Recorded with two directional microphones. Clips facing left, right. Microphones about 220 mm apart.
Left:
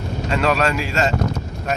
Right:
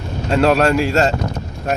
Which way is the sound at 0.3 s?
45° right (ahead or behind).